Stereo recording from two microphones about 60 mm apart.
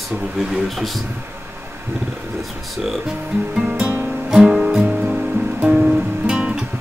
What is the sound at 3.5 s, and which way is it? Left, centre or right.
Music, centre.